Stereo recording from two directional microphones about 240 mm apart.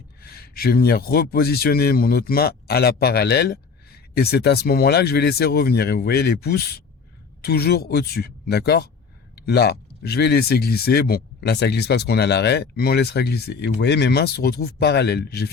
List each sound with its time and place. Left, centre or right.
0.2 s a man's voice: left